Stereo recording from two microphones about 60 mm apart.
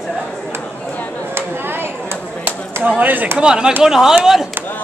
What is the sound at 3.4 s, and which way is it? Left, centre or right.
Speech, centre.